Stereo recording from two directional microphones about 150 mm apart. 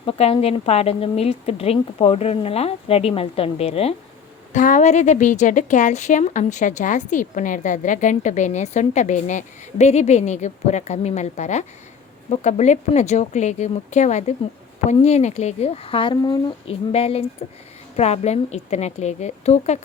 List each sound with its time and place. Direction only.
0.0 s speech: 40° left (ahead or behind)
4.5 s a woman's voice: 55° left (ahead or behind)